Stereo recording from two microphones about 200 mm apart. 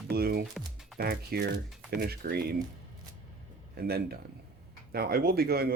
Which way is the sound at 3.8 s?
50° right (ahead or behind).